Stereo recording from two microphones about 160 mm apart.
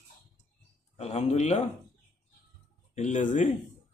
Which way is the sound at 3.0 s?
50° left (ahead or behind).